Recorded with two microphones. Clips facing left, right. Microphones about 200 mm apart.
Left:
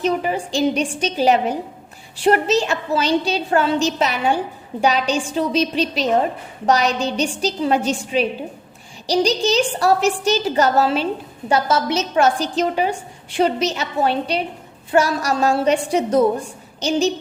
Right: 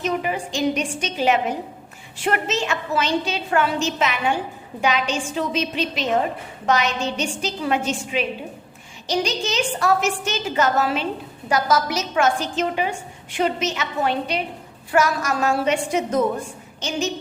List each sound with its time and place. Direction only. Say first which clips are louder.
0.0 s a woman's voice: left 4 dB; 35° left (ahead or behind)